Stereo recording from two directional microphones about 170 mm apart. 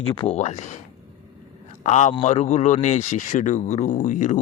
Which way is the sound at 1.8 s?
45° left (ahead or behind).